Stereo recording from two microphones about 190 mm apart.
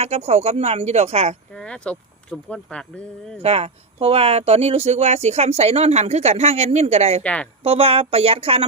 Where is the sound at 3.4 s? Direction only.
30° right (ahead or behind).